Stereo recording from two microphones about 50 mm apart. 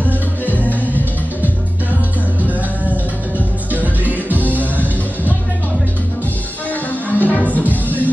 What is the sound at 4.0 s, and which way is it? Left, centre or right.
Music, left.